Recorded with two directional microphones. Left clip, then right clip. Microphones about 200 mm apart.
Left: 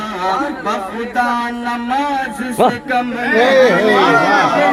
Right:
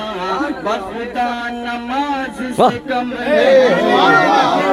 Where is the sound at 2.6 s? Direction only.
15° right (ahead or behind).